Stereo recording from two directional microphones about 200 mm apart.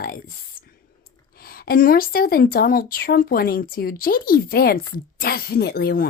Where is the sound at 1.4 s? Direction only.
50° left (ahead or behind).